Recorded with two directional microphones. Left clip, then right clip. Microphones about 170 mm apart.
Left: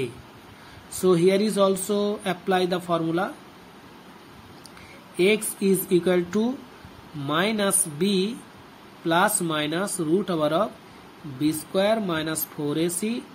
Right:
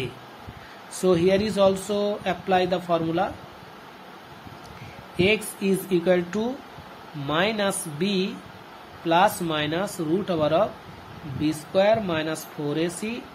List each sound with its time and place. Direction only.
0.9 s speech: 15° left (ahead or behind)
5.1 s speech: 15° left (ahead or behind)